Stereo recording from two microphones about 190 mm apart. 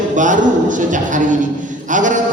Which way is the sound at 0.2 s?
40° right (ahead or behind).